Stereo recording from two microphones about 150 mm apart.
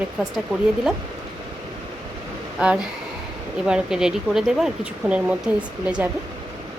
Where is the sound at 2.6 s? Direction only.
5° right (ahead or behind).